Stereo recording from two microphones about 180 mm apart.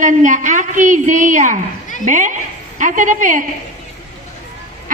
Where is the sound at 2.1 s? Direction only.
45° right (ahead or behind).